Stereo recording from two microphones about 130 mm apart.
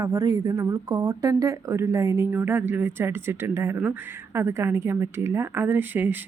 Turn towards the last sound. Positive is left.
turn(degrees=-15)  # may be behind; listen again after turning